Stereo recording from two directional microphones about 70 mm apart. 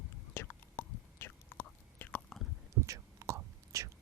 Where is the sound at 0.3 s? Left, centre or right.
Left.